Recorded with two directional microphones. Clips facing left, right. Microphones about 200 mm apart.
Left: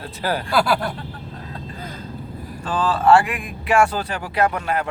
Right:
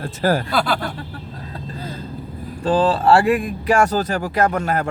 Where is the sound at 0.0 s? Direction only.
45° right (ahead or behind).